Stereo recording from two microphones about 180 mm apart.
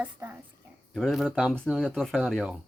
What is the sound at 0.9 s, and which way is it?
Speech, centre (ahead or behind).